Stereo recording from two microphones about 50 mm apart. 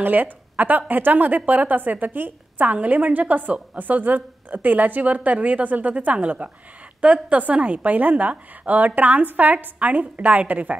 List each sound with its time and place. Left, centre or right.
0.0 s a woman's voice: right